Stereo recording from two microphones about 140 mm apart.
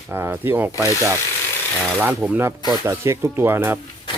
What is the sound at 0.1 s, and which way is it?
Speech, 15° right (ahead or behind).